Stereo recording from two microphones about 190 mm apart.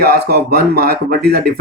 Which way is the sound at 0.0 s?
55° right (ahead or behind).